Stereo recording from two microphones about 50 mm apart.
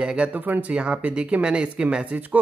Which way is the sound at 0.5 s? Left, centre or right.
Right.